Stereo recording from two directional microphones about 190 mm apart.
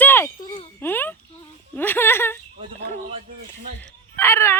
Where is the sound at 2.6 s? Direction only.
35° right (ahead or behind).